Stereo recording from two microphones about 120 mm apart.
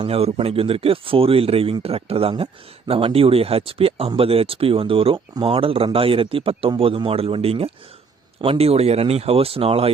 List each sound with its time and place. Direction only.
0.0 s a man's voice: 55° right (ahead or behind)